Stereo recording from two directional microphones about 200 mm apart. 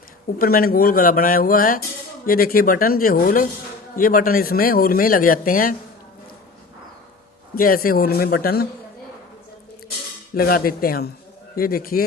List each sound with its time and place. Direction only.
0.3 s speech: 45° left (ahead or behind)
7.5 s speech: 45° left (ahead or behind)
10.3 s speech: 45° left (ahead or behind)